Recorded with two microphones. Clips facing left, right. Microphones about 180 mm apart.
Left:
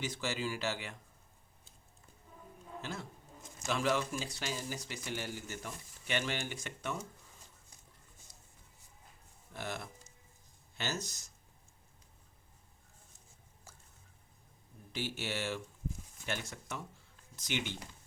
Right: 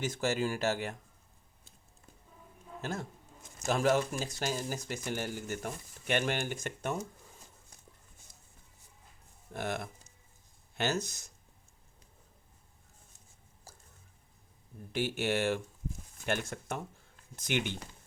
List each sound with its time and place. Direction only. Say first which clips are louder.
0.0 s speech: right 6 dB; 45° right (ahead or behind)
2.8 s speech: right 7 dB; 45° right (ahead or behind)
9.5 s speech: right 6 dB; 50° right (ahead or behind)
13.7 s a sound: right 3 dB; 35° right (ahead or behind)
14.9 s speech: right 7 dB; 55° right (ahead or behind)